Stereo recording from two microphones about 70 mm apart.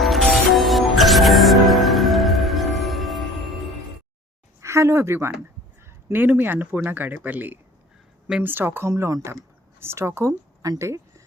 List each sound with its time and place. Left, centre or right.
0.0 s music: centre
4.6 s speech: right
8.9 s speech: right
10.6 s speech: right